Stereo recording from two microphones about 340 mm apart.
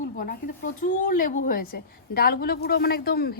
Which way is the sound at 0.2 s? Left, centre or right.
Left.